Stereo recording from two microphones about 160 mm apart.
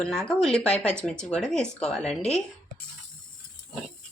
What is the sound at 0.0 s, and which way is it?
Speech, 5° left (ahead or behind).